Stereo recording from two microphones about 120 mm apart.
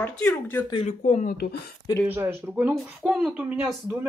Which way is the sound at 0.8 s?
70° left (ahead or behind).